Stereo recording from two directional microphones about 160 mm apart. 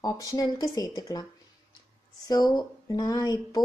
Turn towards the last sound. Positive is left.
turn(degrees=25)  # may be behind; listen again after turning